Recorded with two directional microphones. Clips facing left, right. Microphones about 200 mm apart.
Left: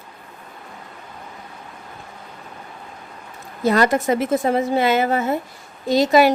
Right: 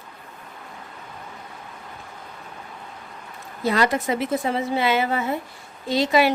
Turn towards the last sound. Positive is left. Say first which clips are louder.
# left 5 dB
turn(degrees=45)  # may be behind; listen again after turning